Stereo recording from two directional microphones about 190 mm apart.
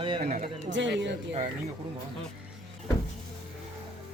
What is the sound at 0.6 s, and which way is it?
Speech, 75° right (ahead or behind).